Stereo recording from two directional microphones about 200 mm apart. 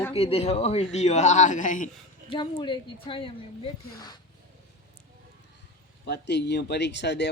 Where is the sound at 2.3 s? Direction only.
25° left (ahead or behind).